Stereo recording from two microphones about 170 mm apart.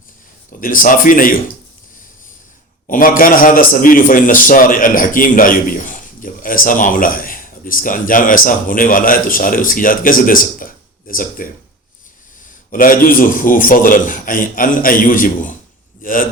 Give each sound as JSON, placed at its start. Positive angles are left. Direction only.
{"t": 0.6, "sound": "a man's voice", "side_deg": 55}
{"t": 2.8, "sound": "a man's voice", "side_deg": 55}
{"t": 12.7, "sound": "a man's voice", "side_deg": 55}